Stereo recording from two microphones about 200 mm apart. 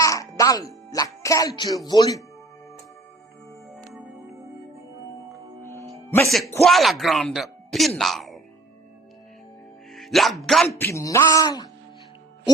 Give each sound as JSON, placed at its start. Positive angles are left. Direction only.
{"t": 0.0, "sound": "speech", "side_deg": 15}
{"t": 6.6, "sound": "speech", "side_deg": 0}
{"t": 9.9, "sound": "music", "side_deg": 0}
{"t": 10.4, "sound": "speech", "side_deg": 0}
{"t": 10.8, "sound": "speech", "side_deg": 15}